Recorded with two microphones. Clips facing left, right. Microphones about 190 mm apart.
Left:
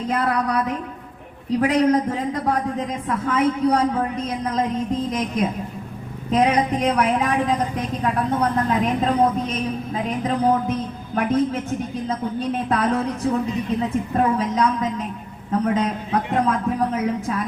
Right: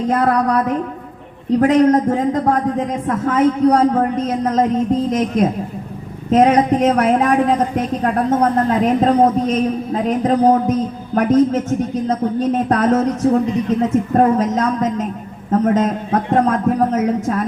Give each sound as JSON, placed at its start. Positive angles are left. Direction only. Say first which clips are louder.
{"t": 0.1, "sound": "a woman's voice", "louder": "right 5 dB", "side_deg": -45}